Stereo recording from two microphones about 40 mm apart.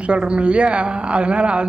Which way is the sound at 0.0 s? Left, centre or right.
Right.